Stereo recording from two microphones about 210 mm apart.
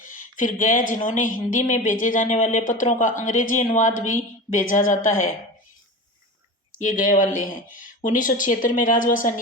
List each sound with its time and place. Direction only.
0.3 s a woman's voice: 40° left (ahead or behind)
6.7 s speech: 40° left (ahead or behind)